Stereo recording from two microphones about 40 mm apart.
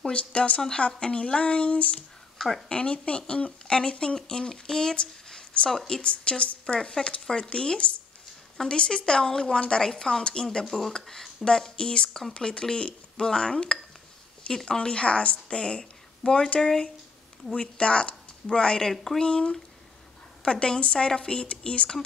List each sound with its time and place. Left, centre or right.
0.0 s a woman's voice: left
2.3 s a sound: centre
2.7 s a woman's voice: left
5.7 s a woman's voice: centre
10.6 s a woman's voice: centre; by 16.4 s left
16.6 s a woman's voice: centre
18.9 s speech: centre
19.2 s a woman's voice: left